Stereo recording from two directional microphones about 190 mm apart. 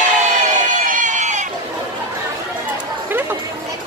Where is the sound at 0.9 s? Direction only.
40° right (ahead or behind).